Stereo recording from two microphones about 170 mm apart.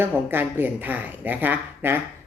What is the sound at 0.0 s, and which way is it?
A woman's voice, 10° right (ahead or behind).